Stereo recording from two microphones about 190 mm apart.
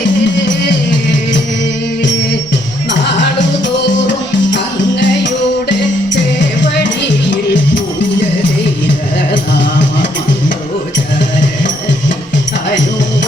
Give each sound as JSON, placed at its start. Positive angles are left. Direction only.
{"t": 2.9, "sound": "music", "side_deg": 70}
{"t": 9.3, "sound": "music", "side_deg": 70}
{"t": 11.6, "sound": "music", "side_deg": 70}